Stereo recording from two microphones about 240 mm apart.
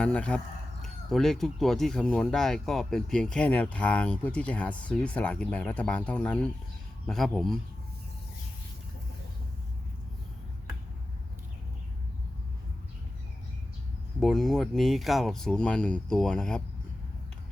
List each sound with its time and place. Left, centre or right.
0.0 s speech: centre
14.2 s speech: centre